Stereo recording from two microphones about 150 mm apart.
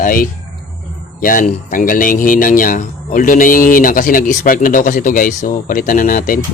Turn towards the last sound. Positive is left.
turn(degrees=65)  # may be behind; listen again after turning